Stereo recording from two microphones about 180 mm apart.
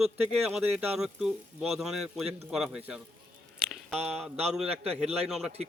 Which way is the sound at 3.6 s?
Centre (ahead or behind).